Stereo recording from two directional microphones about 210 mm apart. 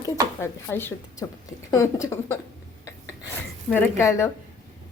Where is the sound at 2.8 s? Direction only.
10° left (ahead or behind).